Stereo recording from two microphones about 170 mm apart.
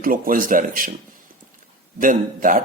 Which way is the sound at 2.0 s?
50° right (ahead or behind).